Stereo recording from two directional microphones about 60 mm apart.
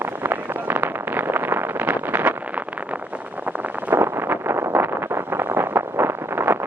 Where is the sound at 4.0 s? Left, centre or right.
Right.